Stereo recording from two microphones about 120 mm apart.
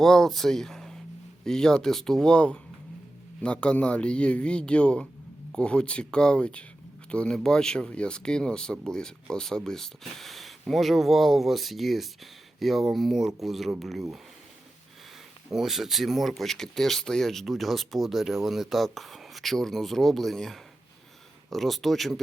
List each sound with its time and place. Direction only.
0.0 s a man's voice: 5° left (ahead or behind)
15.4 s speech: 5° right (ahead or behind)